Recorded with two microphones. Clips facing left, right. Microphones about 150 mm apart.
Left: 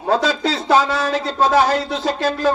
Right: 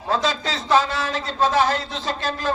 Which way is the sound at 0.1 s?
40° left (ahead or behind).